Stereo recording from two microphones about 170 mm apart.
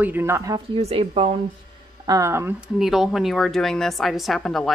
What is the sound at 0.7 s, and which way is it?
Speech, 35° right (ahead or behind).